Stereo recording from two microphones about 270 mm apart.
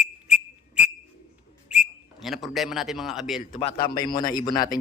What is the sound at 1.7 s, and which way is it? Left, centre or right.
A man's voice, centre.